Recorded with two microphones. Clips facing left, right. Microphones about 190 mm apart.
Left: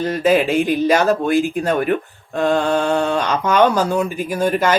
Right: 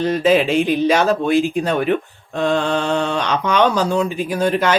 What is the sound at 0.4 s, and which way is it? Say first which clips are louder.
Speech: even; 45° left (ahead or behind).